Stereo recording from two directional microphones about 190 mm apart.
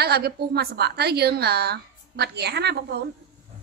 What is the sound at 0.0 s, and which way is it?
Speech, 55° right (ahead or behind).